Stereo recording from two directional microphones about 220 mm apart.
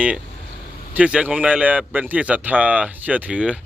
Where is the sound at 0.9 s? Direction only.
5° right (ahead or behind).